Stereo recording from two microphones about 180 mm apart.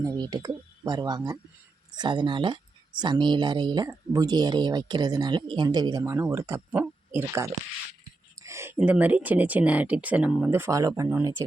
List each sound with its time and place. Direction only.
0.0 s speech: 20° right (ahead or behind)